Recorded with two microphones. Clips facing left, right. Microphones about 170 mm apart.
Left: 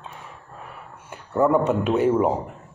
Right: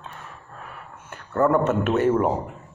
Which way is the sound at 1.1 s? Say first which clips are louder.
Left 1 dB; 15° left (ahead or behind).